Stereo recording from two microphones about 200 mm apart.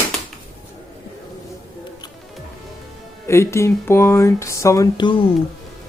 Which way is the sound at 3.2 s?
15° left (ahead or behind).